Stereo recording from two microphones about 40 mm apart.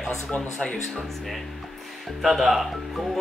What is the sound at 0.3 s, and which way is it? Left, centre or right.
Speech, left.